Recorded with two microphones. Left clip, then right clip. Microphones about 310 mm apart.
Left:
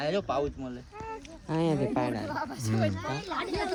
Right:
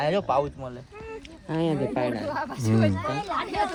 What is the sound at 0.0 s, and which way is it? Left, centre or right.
Speech, right.